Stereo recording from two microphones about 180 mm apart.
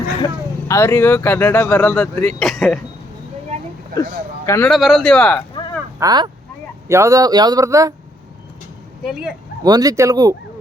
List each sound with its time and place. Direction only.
0.7 s speech: 15° left (ahead or behind)
4.4 s a man's voice: 15° left (ahead or behind)
4.7 s speech: centre (ahead or behind)
6.0 s speech: 20° right (ahead or behind)
9.0 s speech: centre (ahead or behind)
9.6 s speech: 20° right (ahead or behind)